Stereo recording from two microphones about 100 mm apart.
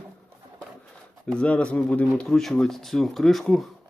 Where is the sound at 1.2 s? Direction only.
10° left (ahead or behind).